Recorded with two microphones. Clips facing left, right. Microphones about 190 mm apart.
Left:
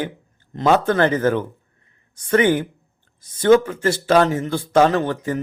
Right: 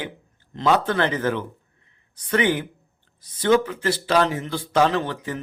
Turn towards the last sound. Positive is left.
turn(degrees=45)  # may be behind; listen again after turning